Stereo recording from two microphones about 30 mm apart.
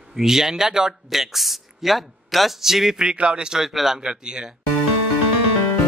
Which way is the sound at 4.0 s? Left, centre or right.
Right.